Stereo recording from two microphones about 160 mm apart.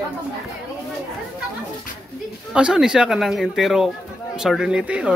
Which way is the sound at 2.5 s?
5° right (ahead or behind).